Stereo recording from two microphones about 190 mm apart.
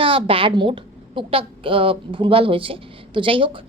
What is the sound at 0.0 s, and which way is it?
A woman's voice, 30° right (ahead or behind).